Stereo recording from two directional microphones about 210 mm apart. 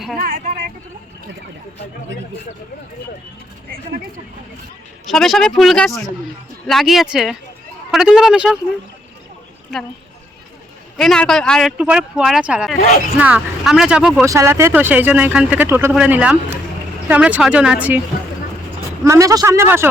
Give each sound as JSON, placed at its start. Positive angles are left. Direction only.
{"t": 0.2, "sound": "speech", "side_deg": -45}
{"t": 5.0, "sound": "speech", "side_deg": 0}
{"t": 9.7, "sound": "speech", "side_deg": 0}
{"t": 10.9, "sound": "speech", "side_deg": 0}
{"t": 19.0, "sound": "speech", "side_deg": -15}